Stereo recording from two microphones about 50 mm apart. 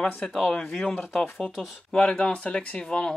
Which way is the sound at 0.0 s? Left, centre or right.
Centre.